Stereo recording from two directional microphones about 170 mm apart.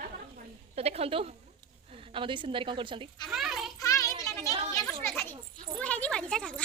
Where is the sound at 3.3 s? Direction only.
Centre (ahead or behind).